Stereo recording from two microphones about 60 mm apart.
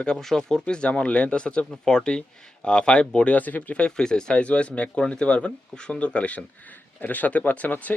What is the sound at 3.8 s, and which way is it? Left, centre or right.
Speech, centre.